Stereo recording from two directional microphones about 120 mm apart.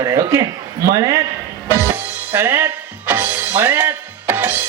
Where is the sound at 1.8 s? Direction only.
15° right (ahead or behind).